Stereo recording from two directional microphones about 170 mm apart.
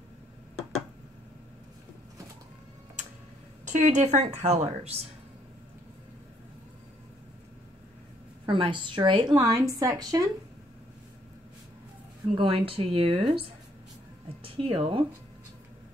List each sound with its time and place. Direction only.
3.6 s a woman's voice: 45° right (ahead or behind)
8.5 s a woman's voice: 30° right (ahead or behind)
12.4 s speech: 30° right (ahead or behind)